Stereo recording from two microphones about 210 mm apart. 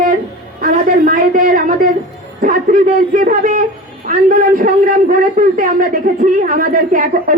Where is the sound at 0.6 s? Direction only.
40° right (ahead or behind).